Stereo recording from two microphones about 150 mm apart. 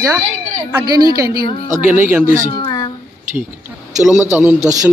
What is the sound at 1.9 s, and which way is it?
Speech, 10° right (ahead or behind).